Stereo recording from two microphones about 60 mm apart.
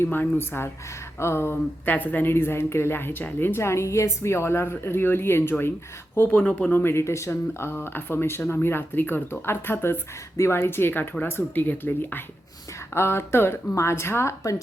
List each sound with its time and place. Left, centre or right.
0.0 s speech: left
6.1 s speech: left
6.7 s speech: left
12.9 s speech: left